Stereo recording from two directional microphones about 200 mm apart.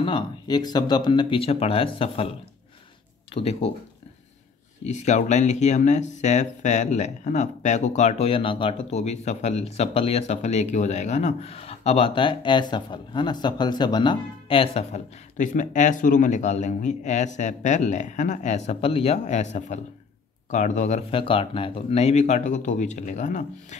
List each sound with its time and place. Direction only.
0.0 s speech: 20° left (ahead or behind)
3.3 s speech: 30° left (ahead or behind)
4.8 s speech: 35° left (ahead or behind)